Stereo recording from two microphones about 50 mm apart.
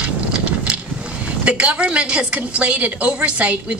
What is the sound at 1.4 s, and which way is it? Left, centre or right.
A woman's voice, right.